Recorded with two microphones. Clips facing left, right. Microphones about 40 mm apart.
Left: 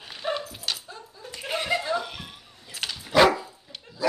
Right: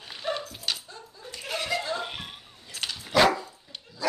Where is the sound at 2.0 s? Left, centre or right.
Right.